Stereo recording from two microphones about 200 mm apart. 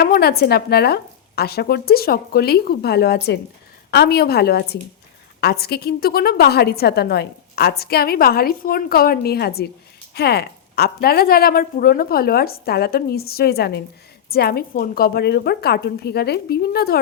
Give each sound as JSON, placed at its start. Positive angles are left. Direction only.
{"t": 0.0, "sound": "a woman's voice", "side_deg": 50}